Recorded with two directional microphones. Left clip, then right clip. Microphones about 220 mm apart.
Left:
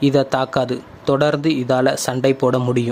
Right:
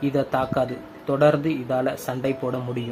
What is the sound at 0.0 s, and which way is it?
Speech, 45° left (ahead or behind).